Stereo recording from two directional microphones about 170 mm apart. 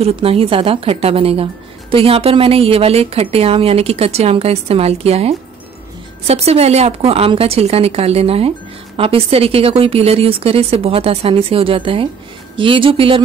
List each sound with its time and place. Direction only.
0.0 s a woman's voice: 35° right (ahead or behind)